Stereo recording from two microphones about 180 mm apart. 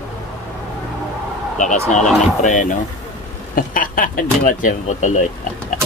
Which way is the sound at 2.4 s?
45° left (ahead or behind).